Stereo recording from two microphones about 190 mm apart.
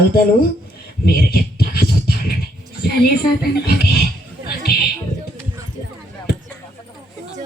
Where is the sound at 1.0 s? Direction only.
55° left (ahead or behind).